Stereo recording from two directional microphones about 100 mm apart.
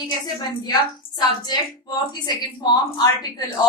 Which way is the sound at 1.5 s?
45° left (ahead or behind).